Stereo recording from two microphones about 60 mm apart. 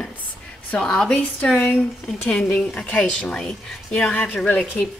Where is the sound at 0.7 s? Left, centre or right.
Centre.